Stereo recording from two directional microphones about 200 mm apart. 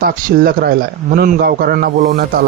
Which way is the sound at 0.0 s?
45° right (ahead or behind).